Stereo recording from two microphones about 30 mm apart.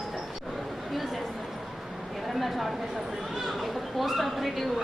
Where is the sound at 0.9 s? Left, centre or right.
Centre.